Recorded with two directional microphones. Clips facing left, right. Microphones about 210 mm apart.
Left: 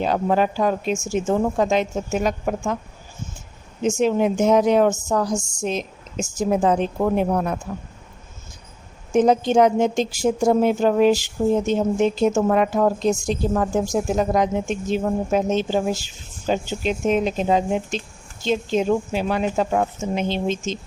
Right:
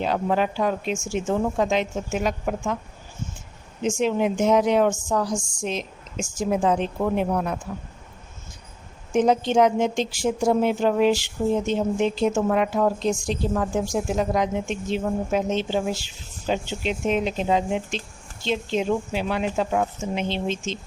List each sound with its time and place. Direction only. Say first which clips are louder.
0.0 s speech: left 3 dB; 40° left (ahead or behind)
3.8 s speech: left 3 dB; 40° left (ahead or behind)
9.1 s speech: left 3 dB; 45° left (ahead or behind)